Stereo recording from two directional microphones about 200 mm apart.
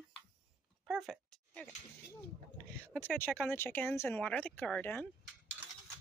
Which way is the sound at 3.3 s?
Centre (ahead or behind).